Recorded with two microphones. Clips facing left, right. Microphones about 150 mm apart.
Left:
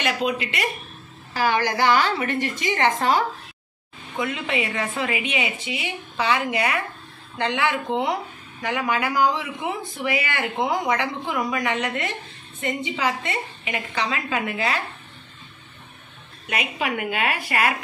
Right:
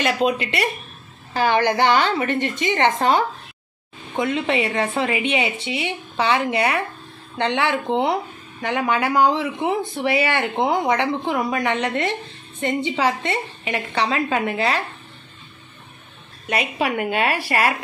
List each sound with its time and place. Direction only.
0.0 s a woman's voice: 30° right (ahead or behind)
16.4 s a woman's voice: 35° right (ahead or behind)